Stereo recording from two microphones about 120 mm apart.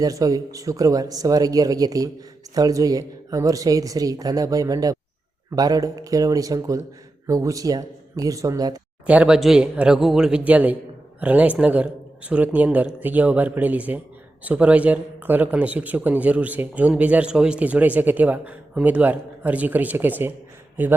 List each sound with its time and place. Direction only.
0.0 s speech: 30° right (ahead or behind)
9.0 s a man's voice: 10° right (ahead or behind)